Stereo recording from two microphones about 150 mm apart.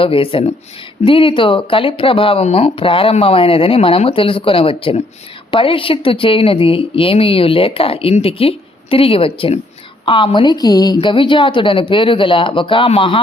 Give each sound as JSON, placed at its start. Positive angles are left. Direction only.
{"t": 0.0, "sound": "a woman's voice", "side_deg": 35}